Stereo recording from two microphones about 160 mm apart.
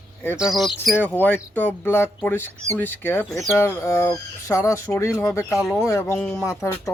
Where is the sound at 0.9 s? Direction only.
10° left (ahead or behind).